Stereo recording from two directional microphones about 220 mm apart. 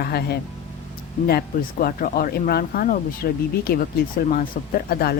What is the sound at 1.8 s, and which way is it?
Speech, 40° left (ahead or behind).